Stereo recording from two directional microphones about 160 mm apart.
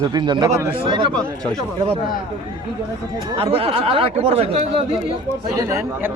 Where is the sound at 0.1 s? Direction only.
25° right (ahead or behind).